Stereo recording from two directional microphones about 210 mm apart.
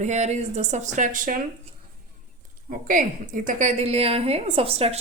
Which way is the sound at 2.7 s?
40° right (ahead or behind).